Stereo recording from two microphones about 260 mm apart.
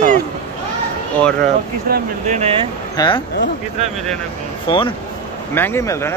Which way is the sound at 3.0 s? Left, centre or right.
Centre.